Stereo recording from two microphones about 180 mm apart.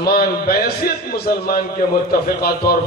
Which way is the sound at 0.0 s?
55° left (ahead or behind).